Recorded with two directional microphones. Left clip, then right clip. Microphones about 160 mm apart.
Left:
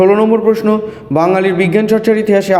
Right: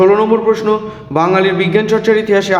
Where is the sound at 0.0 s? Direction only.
30° left (ahead or behind).